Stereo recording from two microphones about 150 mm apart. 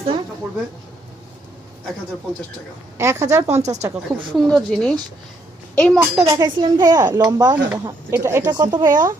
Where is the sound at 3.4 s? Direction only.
45° right (ahead or behind).